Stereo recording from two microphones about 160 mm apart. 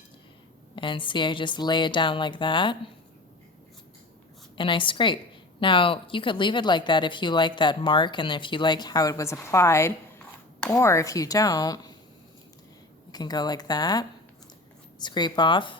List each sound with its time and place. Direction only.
0.8 s a woman's voice: 30° left (ahead or behind)
4.5 s a woman's voice: 30° left (ahead or behind)
13.1 s a woman's voice: 25° left (ahead or behind)